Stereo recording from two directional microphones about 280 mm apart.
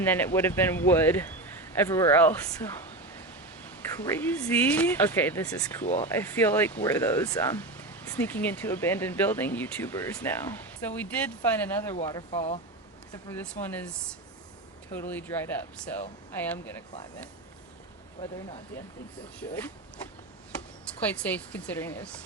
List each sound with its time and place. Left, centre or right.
0.0 s speech: centre
3.9 s speech: centre
12.3 s speech: left
13.2 s speech: centre
14.9 s speech: centre
19.4 s a woman's voice: centre
21.1 s a woman's voice: centre